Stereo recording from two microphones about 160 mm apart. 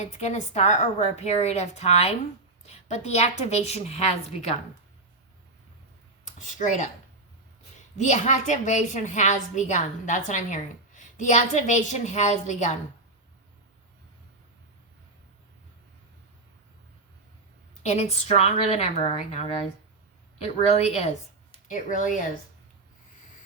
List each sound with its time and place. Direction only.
0.0 s a woman's voice: 45° left (ahead or behind)
6.5 s a woman's voice: 50° left (ahead or behind)
7.9 s a woman's voice: 45° left (ahead or behind)
17.8 s a woman's voice: 45° left (ahead or behind)
21.7 s a woman's voice: 50° left (ahead or behind)